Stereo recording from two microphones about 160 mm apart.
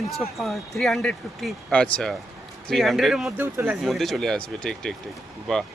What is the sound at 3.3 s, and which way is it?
Speech, 15° right (ahead or behind).